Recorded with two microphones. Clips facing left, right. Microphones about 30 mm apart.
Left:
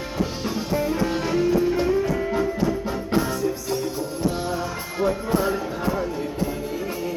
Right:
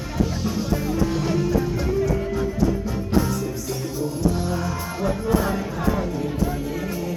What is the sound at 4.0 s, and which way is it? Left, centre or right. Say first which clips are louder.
Music: right 2 dB; left.